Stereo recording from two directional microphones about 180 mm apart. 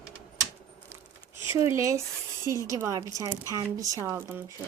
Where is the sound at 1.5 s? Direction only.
15° right (ahead or behind).